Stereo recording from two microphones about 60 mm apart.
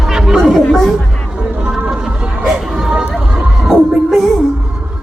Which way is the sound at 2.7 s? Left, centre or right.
Centre.